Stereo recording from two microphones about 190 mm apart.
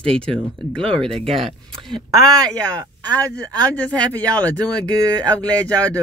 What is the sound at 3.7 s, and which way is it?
Speech, 10° left (ahead or behind).